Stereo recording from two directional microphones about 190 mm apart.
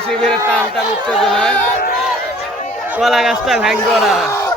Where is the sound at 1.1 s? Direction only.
Centre (ahead or behind).